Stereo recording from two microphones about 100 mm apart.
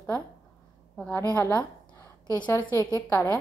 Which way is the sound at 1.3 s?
20° left (ahead or behind).